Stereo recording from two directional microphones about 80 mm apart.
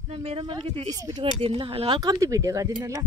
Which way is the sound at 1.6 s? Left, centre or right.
Right.